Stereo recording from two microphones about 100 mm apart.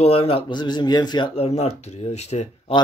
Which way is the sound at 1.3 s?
90° left.